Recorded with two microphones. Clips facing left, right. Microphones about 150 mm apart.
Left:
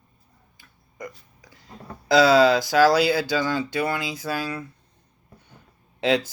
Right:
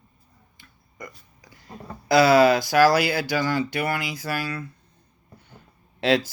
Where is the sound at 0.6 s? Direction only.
15° left (ahead or behind).